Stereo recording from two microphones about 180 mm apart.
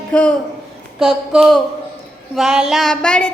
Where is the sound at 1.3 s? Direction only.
Centre (ahead or behind).